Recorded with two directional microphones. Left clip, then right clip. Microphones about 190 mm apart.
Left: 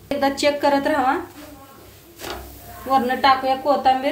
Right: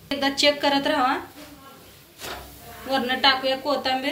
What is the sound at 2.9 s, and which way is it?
A woman's voice, 50° left (ahead or behind).